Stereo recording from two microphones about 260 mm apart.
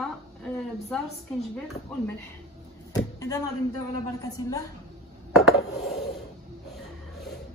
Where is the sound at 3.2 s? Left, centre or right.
Centre.